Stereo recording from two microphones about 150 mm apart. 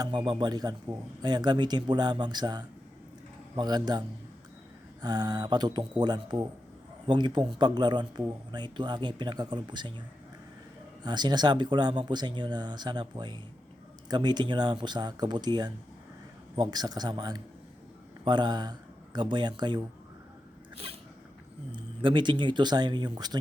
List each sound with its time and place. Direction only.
0.0 s speech: 30° right (ahead or behind)
5.0 s speech: 25° right (ahead or behind)
11.0 s speech: 30° right (ahead or behind)
21.7 s speech: 35° right (ahead or behind)